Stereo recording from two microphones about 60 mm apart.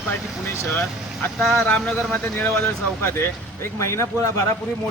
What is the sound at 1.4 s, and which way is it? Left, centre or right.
Speech, centre.